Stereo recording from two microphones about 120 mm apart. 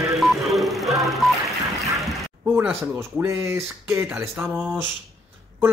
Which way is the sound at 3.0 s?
20° right (ahead or behind).